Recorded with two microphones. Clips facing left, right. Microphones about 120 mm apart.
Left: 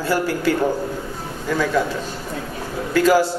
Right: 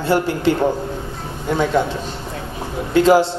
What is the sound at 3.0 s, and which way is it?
Speech, 25° right (ahead or behind).